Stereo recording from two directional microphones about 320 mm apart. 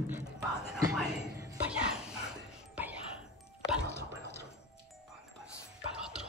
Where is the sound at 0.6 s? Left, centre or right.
Centre.